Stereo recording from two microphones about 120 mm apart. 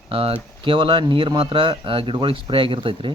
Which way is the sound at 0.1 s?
50° right (ahead or behind).